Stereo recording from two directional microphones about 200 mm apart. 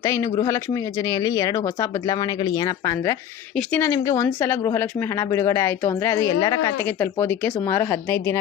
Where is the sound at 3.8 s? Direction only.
15° left (ahead or behind).